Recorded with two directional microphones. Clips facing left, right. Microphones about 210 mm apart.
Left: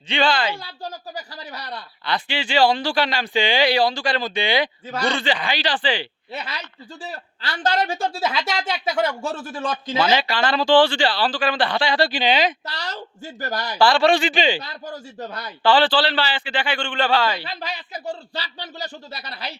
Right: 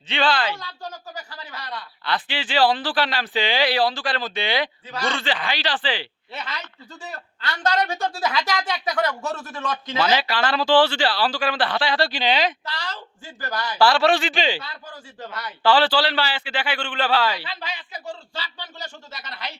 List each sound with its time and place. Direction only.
0.1 s speech: centre (ahead or behind)
0.5 s a woman's voice: 35° left (ahead or behind)
2.0 s speech: centre (ahead or behind)
4.9 s speech: 45° left (ahead or behind)
5.1 s speech: centre (ahead or behind)
7.0 s a woman's voice: 30° left (ahead or behind)
10.1 s speech: 5° right (ahead or behind)
12.6 s speech: 40° left (ahead or behind)
13.7 s speech: 5° right (ahead or behind)
14.6 s speech: 40° left (ahead or behind)
15.6 s a man's voice: 5° right (ahead or behind)
17.4 s speech: 40° left (ahead or behind)